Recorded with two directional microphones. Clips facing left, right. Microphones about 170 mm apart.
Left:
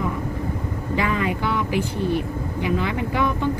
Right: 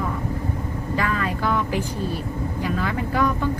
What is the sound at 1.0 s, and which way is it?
Speech, 15° left (ahead or behind).